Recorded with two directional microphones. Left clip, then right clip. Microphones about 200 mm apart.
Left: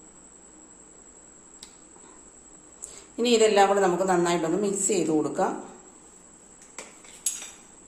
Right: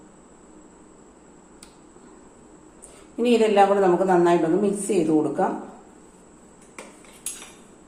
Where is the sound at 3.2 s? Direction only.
25° left (ahead or behind).